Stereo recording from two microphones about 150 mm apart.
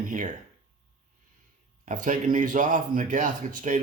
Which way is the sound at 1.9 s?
60° right (ahead or behind).